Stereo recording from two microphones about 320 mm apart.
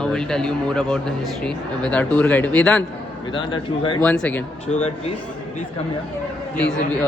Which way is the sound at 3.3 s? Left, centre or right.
Centre.